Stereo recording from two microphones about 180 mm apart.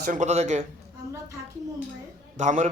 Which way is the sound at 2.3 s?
40° right (ahead or behind).